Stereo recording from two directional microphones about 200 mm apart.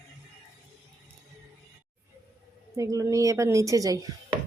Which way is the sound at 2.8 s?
15° right (ahead or behind).